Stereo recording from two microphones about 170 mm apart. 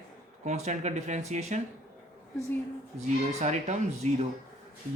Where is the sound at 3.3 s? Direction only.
40° right (ahead or behind).